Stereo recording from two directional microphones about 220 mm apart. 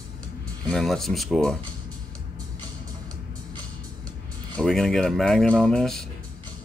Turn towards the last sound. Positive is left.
turn(degrees=0)  # may be behind; listen again after turning